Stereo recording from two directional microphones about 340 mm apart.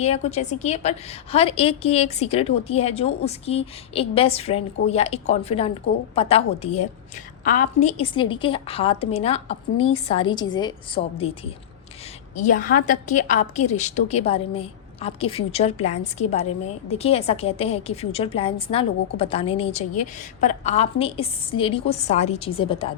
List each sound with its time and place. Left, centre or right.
0.0 s a woman's voice: centre
12.4 s a woman's voice: left